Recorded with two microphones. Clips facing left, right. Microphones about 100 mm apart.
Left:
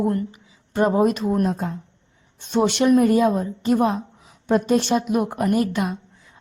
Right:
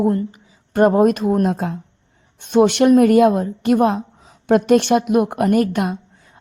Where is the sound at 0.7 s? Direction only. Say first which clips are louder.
Right 5 dB; 55° right (ahead or behind).